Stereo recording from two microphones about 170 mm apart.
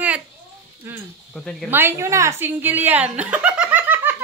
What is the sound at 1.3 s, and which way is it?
Speech, 5° left (ahead or behind).